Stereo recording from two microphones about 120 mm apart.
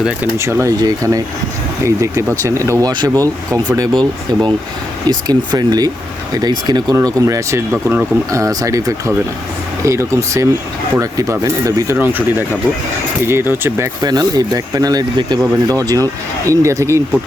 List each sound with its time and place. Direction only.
0.3 s speech: 25° right (ahead or behind)
2.9 s speech: 40° right (ahead or behind)
13.2 s speech: 20° right (ahead or behind)